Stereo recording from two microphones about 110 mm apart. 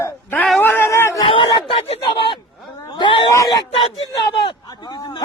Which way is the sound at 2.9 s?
50° left (ahead or behind).